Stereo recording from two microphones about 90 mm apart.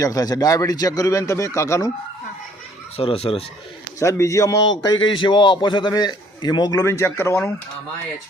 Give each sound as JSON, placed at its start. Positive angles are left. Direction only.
{"t": 0.0, "sound": "speech", "side_deg": 40}
{"t": 3.0, "sound": "speech", "side_deg": 90}
{"t": 4.0, "sound": "a man's voice", "side_deg": 35}
{"t": 6.7, "sound": "speech", "side_deg": 35}